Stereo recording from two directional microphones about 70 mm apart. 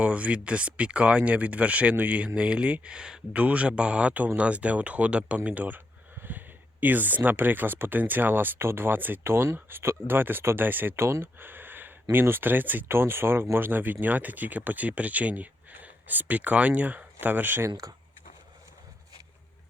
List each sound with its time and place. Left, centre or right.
0.0 s speech: centre
17.8 s speech: right